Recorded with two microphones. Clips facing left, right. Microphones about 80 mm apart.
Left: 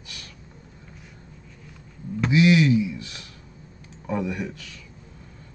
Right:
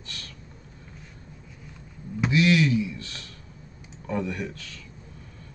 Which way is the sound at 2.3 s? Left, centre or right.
Centre.